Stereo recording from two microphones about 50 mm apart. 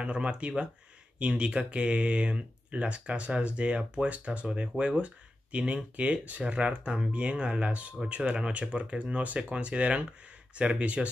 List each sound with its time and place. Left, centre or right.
0.0 s speech: right